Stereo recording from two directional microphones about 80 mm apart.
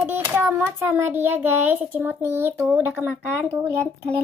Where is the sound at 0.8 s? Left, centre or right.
Right.